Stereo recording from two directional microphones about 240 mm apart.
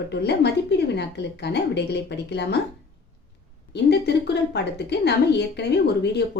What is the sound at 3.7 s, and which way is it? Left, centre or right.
Speech, left.